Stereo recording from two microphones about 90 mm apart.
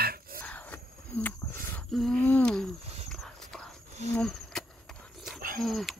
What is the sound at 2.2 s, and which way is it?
Cricket, 15° left (ahead or behind).